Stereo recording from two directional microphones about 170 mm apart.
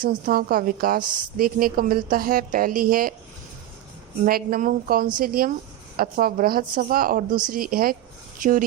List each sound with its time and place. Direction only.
0.0 s a woman's voice: 55° right (ahead or behind)
4.3 s a woman's voice: 60° right (ahead or behind)